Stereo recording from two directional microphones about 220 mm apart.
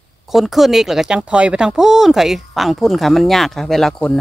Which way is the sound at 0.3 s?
Centre (ahead or behind).